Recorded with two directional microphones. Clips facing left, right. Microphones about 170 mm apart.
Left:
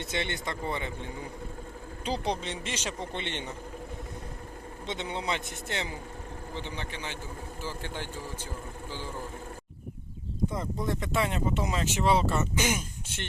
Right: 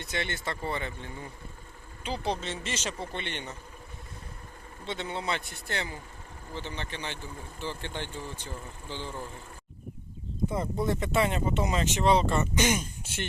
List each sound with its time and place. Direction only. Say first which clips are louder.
0.0 s speech: left 1 dB; 20° left (ahead or behind)
2.2 s speech: even; 15° left (ahead or behind)
3.1 s speech: left 1 dB; 20° left (ahead or behind)
4.9 s speech: even; 20° left (ahead or behind)
10.5 s speech: right 3 dB; 5° right (ahead or behind)